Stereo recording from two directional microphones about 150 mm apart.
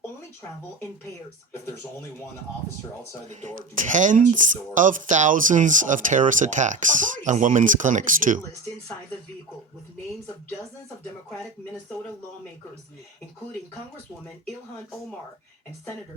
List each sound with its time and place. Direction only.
3.2 s speech: 55° right (ahead or behind)